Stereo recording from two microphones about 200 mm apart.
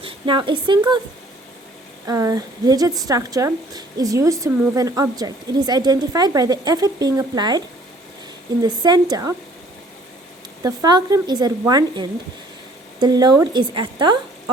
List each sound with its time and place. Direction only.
0.0 s speech: 25° right (ahead or behind)
2.0 s a woman's voice: 15° right (ahead or behind)
8.6 s a woman's voice: 20° right (ahead or behind)
10.6 s a woman's voice: 15° right (ahead or behind)